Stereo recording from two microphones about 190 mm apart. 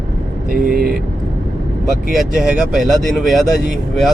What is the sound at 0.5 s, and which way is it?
Speech, 50° right (ahead or behind).